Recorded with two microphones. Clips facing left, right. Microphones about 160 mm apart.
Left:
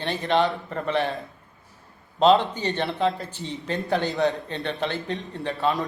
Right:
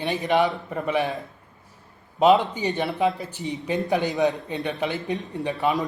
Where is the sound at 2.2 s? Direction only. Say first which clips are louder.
Even; 10° right (ahead or behind).